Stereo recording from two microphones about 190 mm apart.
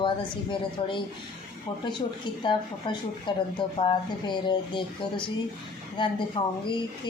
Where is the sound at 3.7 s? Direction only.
25° left (ahead or behind).